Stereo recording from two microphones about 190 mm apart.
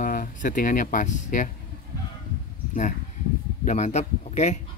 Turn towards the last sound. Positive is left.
turn(degrees=35)  # may be behind; listen again after turning